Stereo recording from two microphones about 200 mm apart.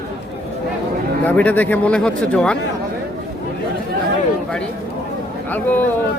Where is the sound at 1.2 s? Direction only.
5° left (ahead or behind).